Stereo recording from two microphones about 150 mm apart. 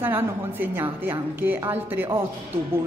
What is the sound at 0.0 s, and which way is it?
A woman's voice, 15° right (ahead or behind).